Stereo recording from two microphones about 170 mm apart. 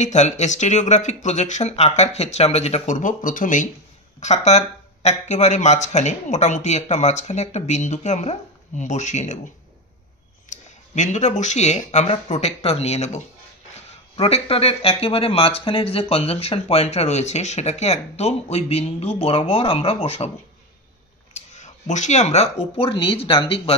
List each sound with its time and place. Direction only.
0.0 s speech: 45° left (ahead or behind)
10.5 s speech: 45° left (ahead or behind)
21.3 s a sound: 40° left (ahead or behind)
22.8 s speech: 35° left (ahead or behind)